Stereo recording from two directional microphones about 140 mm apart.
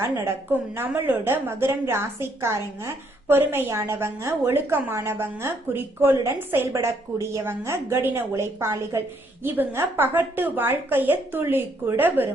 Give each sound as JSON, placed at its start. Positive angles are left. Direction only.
{"t": 0.0, "sound": "a woman's voice", "side_deg": -15}